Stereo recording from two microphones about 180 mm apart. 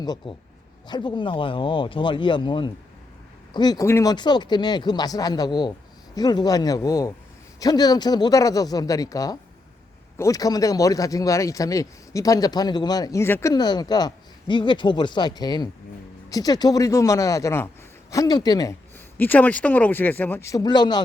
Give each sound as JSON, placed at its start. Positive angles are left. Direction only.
{"t": 0.0, "sound": "speech", "side_deg": 20}